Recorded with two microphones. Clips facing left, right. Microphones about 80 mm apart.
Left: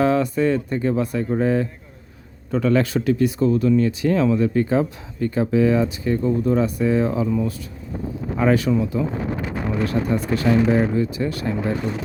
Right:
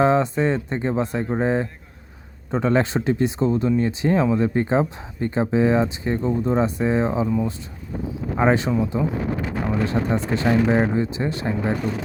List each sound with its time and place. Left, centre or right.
0.0 s speech: right
8.4 s speech: right